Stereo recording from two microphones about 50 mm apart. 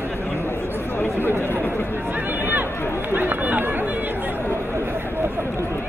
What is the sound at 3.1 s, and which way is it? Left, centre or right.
Run, right.